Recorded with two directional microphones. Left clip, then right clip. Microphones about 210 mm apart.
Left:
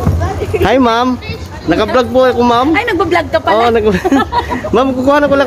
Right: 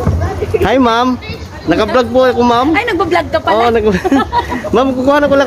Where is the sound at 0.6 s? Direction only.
5° left (ahead or behind).